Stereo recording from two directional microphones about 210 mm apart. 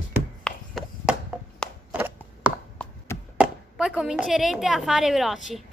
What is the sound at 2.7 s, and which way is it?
Chop, 10° left (ahead or behind).